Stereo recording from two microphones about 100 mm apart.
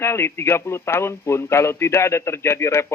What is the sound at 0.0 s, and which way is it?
A man's voice, 25° left (ahead or behind).